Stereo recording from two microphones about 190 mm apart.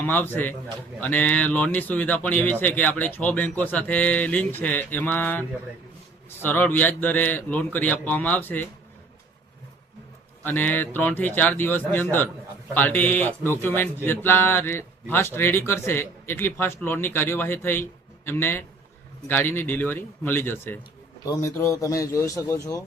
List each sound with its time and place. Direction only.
0.0 s a man's voice: 10° left (ahead or behind)
10.4 s speech: 10° left (ahead or behind)